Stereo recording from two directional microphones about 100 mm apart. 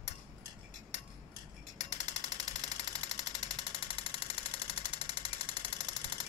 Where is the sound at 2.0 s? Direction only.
90° left.